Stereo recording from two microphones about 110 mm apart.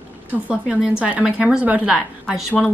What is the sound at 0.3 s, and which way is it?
A woman's voice, 10° right (ahead or behind).